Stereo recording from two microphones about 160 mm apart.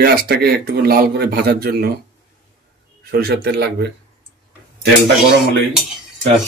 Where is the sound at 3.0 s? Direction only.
85° right.